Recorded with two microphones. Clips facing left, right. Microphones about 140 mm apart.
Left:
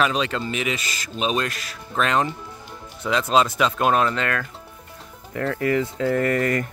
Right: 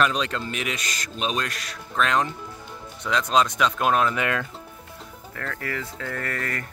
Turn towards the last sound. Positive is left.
turn(degrees=20)  # may be behind; listen again after turning